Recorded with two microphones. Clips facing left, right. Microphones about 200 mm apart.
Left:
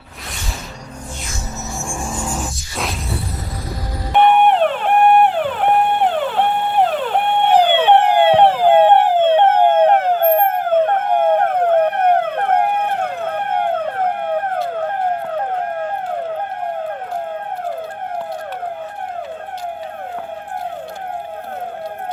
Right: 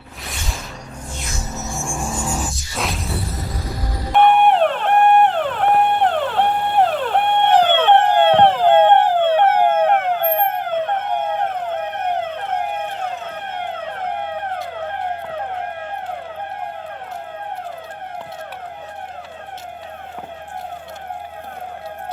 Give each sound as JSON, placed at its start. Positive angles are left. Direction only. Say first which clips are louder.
{"t": 1.8, "sound": "music", "louder": "even", "side_deg": 0}
{"t": 4.1, "sound": "theremin", "louder": "left 1 dB", "side_deg": 0}
{"t": 14.5, "sound": "emergency vehicle", "louder": "left 6 dB", "side_deg": 50}